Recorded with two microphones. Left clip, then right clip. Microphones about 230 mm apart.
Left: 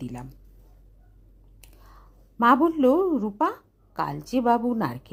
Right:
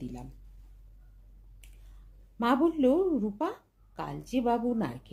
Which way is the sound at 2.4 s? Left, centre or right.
Left.